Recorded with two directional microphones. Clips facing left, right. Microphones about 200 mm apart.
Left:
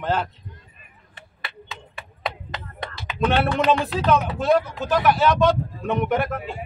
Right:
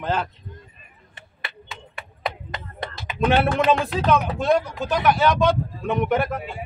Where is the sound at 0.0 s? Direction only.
Centre (ahead or behind).